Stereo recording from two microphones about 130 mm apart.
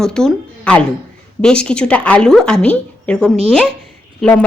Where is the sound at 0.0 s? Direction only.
5° left (ahead or behind).